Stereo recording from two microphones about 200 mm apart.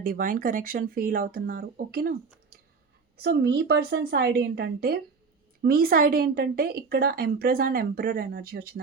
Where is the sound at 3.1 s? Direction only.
55° right (ahead or behind).